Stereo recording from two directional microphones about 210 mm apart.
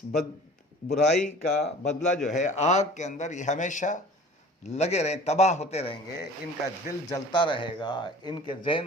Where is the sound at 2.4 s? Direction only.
35° left (ahead or behind).